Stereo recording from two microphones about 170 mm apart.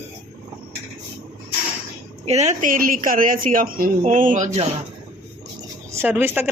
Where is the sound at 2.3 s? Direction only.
40° right (ahead or behind).